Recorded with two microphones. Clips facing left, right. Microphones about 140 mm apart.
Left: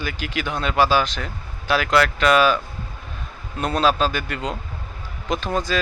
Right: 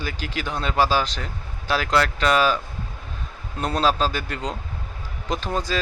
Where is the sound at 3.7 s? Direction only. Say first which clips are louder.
Left 2 dB; 35° right (ahead or behind).